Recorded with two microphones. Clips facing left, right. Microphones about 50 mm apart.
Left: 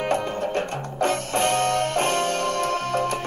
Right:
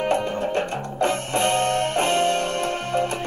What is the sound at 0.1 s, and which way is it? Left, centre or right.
Music, right.